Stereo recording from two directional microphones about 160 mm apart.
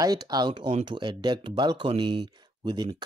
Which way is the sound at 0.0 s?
25° right (ahead or behind).